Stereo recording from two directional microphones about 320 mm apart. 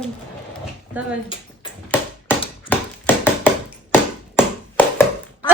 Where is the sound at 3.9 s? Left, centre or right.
Centre.